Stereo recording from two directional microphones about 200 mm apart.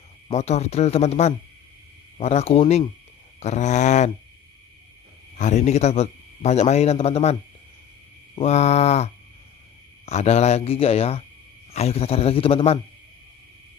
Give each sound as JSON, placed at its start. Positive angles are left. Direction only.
{"t": 0.3, "sound": "a man's voice", "side_deg": 35}
{"t": 5.4, "sound": "a man's voice", "side_deg": 35}
{"t": 8.4, "sound": "a man's voice", "side_deg": 35}